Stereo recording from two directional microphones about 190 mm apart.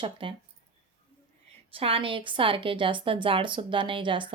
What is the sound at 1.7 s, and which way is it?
A woman's voice, 30° right (ahead or behind).